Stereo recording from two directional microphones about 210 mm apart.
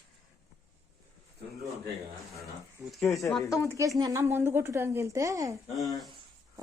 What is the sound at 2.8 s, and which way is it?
Speech, centre (ahead or behind).